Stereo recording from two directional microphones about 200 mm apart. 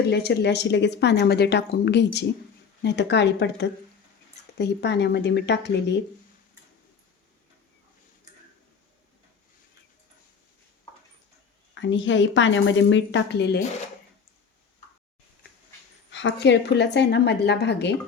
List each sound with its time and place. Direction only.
0.0 s speech: 55° left (ahead or behind)
11.7 s a woman's voice: 65° left (ahead or behind)
16.1 s speech: 65° left (ahead or behind)